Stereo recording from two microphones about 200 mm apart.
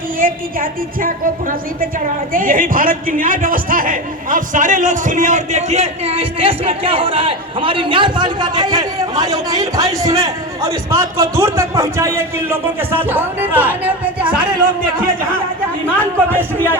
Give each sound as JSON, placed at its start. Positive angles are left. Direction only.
{"t": 0.2, "sound": "a woman's voice", "side_deg": -45}
{"t": 16.0, "sound": "speech", "side_deg": 10}